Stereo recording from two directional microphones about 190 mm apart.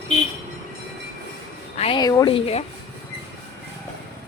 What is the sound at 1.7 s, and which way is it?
Speech, 25° left (ahead or behind).